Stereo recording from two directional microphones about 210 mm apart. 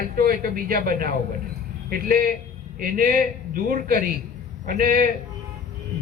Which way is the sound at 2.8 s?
40° right (ahead or behind).